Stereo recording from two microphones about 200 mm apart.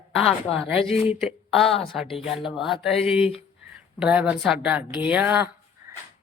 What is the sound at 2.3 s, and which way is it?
Speech, centre (ahead or behind).